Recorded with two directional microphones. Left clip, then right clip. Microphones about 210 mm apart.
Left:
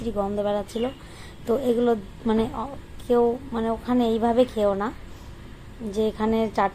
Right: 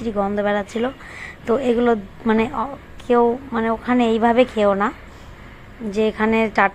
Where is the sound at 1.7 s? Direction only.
30° right (ahead or behind).